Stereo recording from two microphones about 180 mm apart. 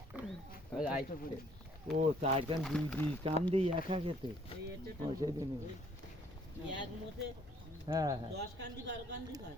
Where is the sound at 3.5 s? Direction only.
30° right (ahead or behind).